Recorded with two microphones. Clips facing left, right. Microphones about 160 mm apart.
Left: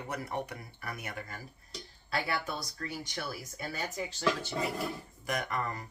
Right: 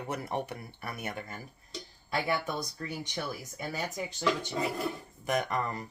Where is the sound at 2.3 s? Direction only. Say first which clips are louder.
Right 4 dB; 15° right (ahead or behind).